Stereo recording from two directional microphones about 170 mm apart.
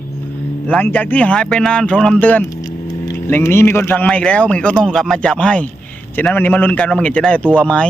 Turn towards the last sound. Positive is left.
turn(degrees=5)  # may be behind; listen again after turning